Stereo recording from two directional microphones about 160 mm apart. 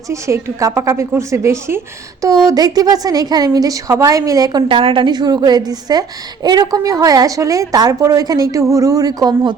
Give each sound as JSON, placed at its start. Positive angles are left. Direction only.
{"t": 0.1, "sound": "a woman's voice", "side_deg": -15}